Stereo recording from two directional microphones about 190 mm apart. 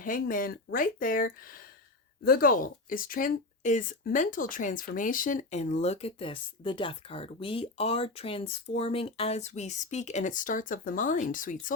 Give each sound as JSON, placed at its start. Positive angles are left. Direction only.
{"t": 0.0, "sound": "speech", "side_deg": 45}